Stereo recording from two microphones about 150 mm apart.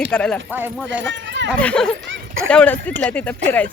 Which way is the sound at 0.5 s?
10° right (ahead or behind).